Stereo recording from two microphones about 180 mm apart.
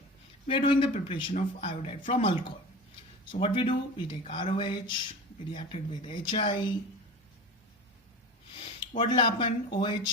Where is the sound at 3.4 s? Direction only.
30° left (ahead or behind).